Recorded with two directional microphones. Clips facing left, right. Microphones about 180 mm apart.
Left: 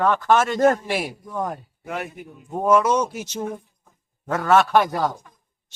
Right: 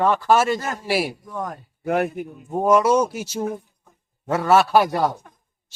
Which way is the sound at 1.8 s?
55° right (ahead or behind).